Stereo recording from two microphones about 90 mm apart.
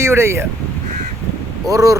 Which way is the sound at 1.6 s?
40° right (ahead or behind).